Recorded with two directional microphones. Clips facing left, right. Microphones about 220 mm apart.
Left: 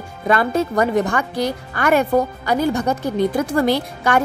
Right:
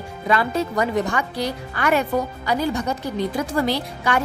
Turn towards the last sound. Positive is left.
turn(degrees=50)  # may be behind; listen again after turning